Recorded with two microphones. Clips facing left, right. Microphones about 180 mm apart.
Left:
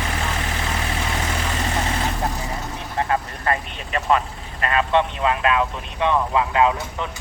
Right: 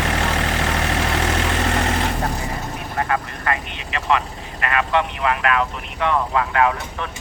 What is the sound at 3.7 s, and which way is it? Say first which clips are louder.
Vehicle: left 1 dB; 40° left (ahead or behind).